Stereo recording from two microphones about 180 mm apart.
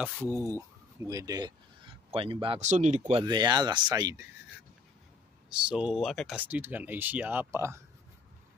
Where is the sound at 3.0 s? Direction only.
25° right (ahead or behind).